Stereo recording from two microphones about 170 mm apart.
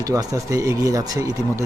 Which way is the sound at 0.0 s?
20° right (ahead or behind).